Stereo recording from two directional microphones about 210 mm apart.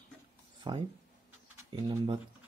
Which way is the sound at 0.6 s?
20° right (ahead or behind).